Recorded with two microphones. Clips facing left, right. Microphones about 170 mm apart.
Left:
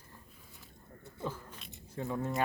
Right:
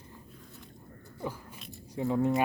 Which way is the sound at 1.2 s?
10° right (ahead or behind).